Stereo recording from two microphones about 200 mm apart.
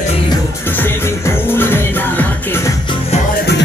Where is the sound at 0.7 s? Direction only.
10° left (ahead or behind).